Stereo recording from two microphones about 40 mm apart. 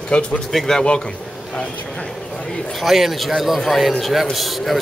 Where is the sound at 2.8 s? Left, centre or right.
Centre.